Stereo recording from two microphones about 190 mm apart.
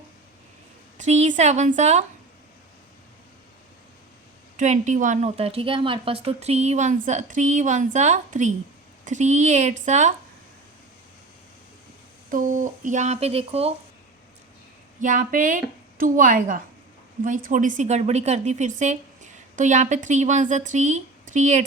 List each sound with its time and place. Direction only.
0.9 s a woman's voice: 35° right (ahead or behind)
4.5 s a woman's voice: 40° right (ahead or behind)
12.3 s a woman's voice: 45° right (ahead or behind)
15.0 s a woman's voice: 45° right (ahead or behind)